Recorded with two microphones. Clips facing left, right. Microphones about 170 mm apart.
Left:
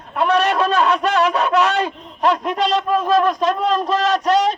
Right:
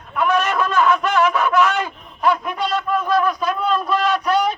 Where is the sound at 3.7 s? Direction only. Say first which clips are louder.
Left 2 dB; 40° left (ahead or behind).